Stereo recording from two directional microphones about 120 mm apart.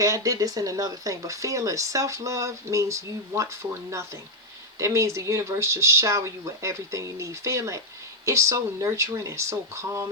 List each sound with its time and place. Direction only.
0.0 s speech: 30° right (ahead or behind)